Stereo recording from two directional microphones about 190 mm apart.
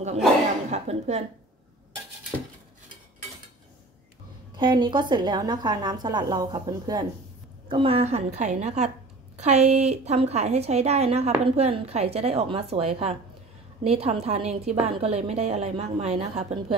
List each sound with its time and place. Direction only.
0.7 s a woman's voice: 35° right (ahead or behind)
4.6 s a woman's voice: 25° right (ahead or behind)